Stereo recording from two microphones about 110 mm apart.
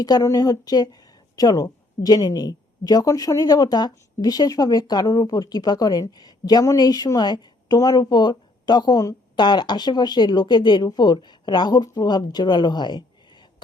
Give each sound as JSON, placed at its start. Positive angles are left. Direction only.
{"t": 0.0, "sound": "speech", "side_deg": 35}